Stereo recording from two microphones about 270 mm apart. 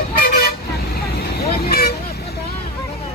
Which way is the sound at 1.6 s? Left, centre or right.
Left.